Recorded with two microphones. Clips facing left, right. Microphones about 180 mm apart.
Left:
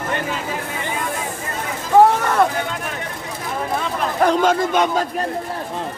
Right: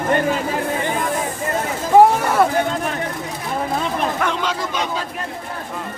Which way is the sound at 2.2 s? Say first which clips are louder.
Right 1 dB; 10° right (ahead or behind).